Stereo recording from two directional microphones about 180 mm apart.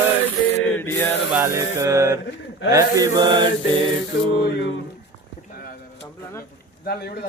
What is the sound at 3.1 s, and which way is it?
Mantra, 25° right (ahead or behind).